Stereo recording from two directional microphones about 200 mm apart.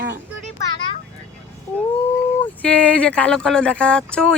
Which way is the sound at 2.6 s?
5° left (ahead or behind).